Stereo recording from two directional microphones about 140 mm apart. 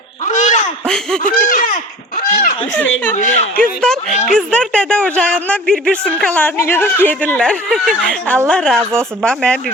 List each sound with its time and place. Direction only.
0.3 s a sound: 60° left (ahead or behind)
0.9 s speech: 5° left (ahead or behind)
1.2 s speech: 85° left
3.2 s speech: 65° left (ahead or behind)
3.8 s a sound: 5° left (ahead or behind)
4.3 s speech: 5° left (ahead or behind)
8.8 s speech: 20° right (ahead or behind)
9.2 s speech: 5° left (ahead or behind)